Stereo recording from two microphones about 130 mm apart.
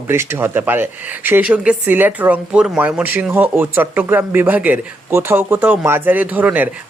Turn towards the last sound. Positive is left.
turn(degrees=-10)  # may be behind; listen again after turning